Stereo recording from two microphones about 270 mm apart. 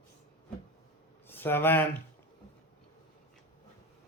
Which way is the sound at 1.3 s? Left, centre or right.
Centre.